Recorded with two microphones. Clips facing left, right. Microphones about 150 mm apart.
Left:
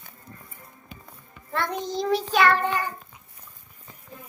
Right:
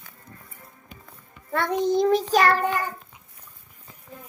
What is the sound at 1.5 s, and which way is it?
Speech, 55° right (ahead or behind).